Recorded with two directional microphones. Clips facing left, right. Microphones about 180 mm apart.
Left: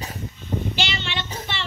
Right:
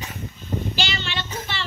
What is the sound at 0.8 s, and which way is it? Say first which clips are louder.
Child singing: even; 20° left (ahead or behind).